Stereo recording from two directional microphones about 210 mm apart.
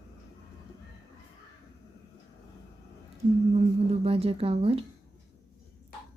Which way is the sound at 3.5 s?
30° right (ahead or behind).